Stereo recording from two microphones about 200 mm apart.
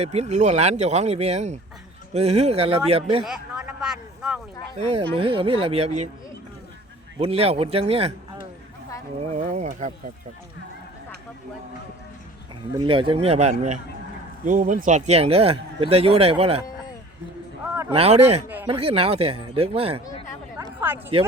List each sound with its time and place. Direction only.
0.0 s speech: 30° right (ahead or behind)
3.2 s a sound: 5° right (ahead or behind)
5.1 s speech: 25° right (ahead or behind)
7.2 s speech: 30° right (ahead or behind)
9.2 s speech: 35° right (ahead or behind)
12.7 s speech: 25° right (ahead or behind)
17.9 s speech: 30° right (ahead or behind)
18.4 s speech: 10° right (ahead or behind)
18.7 s speech: 30° right (ahead or behind)
20.6 s a sound: 10° right (ahead or behind)